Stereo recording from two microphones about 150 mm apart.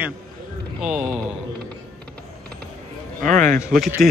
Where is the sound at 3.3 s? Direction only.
60° right (ahead or behind).